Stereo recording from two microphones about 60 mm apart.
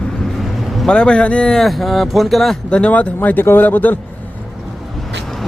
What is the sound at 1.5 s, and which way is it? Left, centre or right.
Speech, centre.